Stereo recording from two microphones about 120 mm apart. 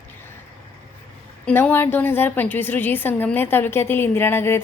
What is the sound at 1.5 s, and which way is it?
A woman's voice, 15° left (ahead or behind).